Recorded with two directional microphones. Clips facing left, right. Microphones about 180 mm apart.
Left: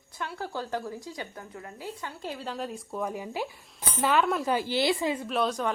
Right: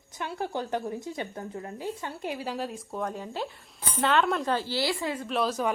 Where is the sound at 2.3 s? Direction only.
10° right (ahead or behind); by 5.2 s 20° left (ahead or behind).